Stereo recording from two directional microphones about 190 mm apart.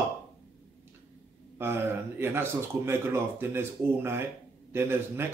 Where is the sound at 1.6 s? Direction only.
10° right (ahead or behind).